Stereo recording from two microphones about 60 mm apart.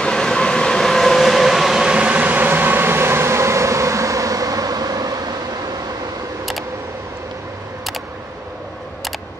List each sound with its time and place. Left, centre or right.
0.0 s train: centre; by 5.6 s right